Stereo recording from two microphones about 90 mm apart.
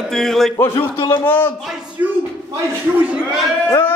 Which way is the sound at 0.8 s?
80° left.